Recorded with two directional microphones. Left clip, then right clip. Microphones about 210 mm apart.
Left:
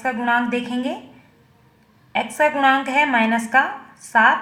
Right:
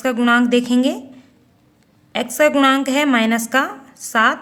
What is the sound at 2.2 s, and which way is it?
Speech, 35° right (ahead or behind).